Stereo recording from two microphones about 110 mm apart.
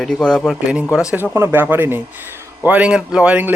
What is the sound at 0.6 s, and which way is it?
Speech, 10° right (ahead or behind).